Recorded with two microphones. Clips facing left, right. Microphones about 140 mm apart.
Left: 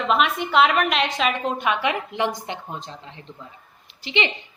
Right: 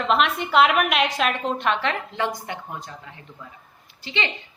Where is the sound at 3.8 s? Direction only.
20° left (ahead or behind).